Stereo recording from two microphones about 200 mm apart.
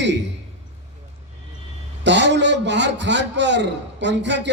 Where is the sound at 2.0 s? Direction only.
60° right (ahead or behind).